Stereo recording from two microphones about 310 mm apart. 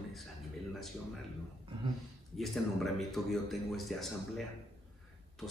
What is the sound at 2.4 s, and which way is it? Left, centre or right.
Speech, centre.